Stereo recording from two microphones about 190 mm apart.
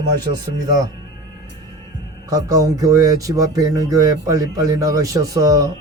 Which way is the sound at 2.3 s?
20° right (ahead or behind).